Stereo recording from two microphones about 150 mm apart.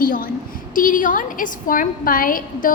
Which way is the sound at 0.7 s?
60° left (ahead or behind).